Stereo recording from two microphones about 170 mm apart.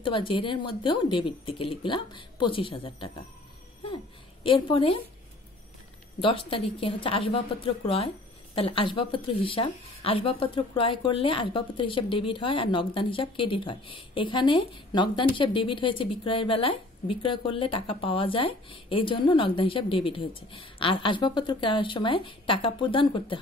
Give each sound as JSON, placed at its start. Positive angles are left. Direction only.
{"t": 0.0, "sound": "a woman's voice", "side_deg": 30}
{"t": 3.8, "sound": "a sound", "side_deg": 30}
{"t": 6.2, "sound": "a woman's voice", "side_deg": 30}